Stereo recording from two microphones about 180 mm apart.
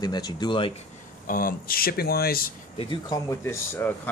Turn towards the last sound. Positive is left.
turn(degrees=10)  # may be behind; listen again after turning